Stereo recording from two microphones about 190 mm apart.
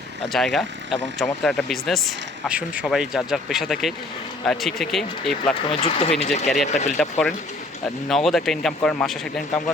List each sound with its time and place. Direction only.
0.3 s speech: centre (ahead or behind)
5.6 s speech: 30° left (ahead or behind)
7.0 s speech: 5° left (ahead or behind)